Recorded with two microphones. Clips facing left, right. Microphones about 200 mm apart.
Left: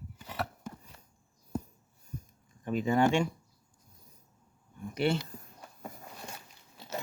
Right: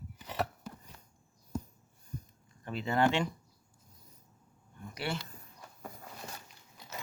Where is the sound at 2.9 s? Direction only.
15° left (ahead or behind).